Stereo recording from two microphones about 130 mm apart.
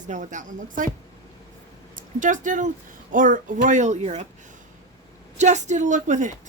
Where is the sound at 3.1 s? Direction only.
90° right; by 4.3 s 60° right (ahead or behind).